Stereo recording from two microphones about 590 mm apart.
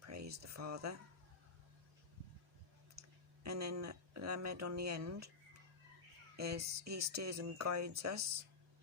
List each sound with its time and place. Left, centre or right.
0.0 s a sound: right
0.5 s speech: right
3.4 s speech: right
6.3 s speech: right